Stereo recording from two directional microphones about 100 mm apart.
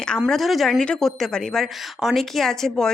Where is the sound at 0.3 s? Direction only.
Centre (ahead or behind).